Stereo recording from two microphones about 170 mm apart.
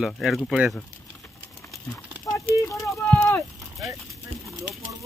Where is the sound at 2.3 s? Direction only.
20° left (ahead or behind).